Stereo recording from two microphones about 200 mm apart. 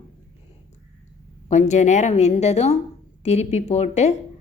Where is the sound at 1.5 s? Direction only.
35° left (ahead or behind).